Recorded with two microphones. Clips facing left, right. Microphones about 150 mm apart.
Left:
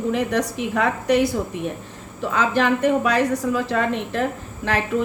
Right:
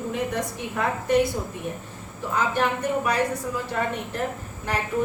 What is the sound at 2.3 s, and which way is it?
A woman's voice, 90° left.